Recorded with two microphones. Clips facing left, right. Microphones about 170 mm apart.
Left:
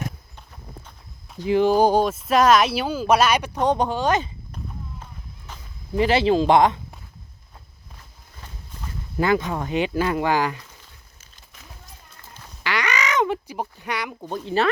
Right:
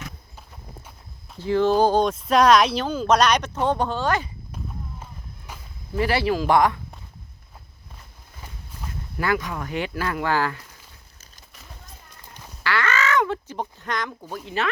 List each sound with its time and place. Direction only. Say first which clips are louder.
1.4 s speech: left 1 dB; 15° left (ahead or behind)
5.5 s a sound: right 1 dB; 10° right (ahead or behind)
6.0 s speech: left 4 dB; 20° left (ahead or behind)
9.1 s speech: left 4 dB; 25° left (ahead or behind)
12.6 s speech: right 1 dB; 15° left (ahead or behind); by 14.7 s 35° left (ahead or behind)